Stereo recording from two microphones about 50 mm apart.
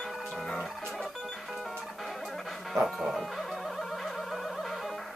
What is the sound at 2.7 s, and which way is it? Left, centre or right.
Music, centre.